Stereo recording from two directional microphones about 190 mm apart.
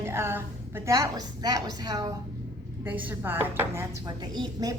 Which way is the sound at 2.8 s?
10° right (ahead or behind).